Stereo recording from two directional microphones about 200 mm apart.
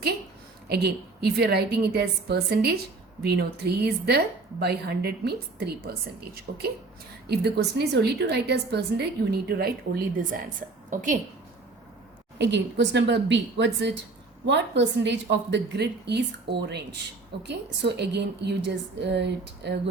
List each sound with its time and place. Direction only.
0.7 s a woman's voice: 55° right (ahead or behind)
12.4 s a woman's voice: 60° right (ahead or behind)